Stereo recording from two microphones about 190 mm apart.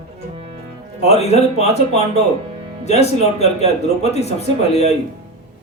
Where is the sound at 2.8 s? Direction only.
35° left (ahead or behind).